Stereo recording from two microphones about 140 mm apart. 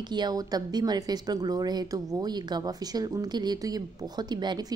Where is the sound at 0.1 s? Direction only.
30° right (ahead or behind).